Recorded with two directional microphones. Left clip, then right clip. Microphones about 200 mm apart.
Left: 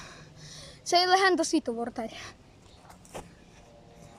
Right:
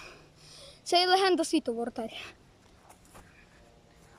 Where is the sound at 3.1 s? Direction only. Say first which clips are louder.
Left 13 dB; 35° left (ahead or behind).